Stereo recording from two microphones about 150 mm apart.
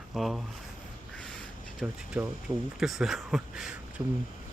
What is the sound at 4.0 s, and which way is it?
Speech, 15° right (ahead or behind).